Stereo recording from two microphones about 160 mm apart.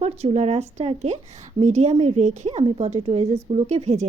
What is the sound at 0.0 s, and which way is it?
A woman's voice, 40° right (ahead or behind).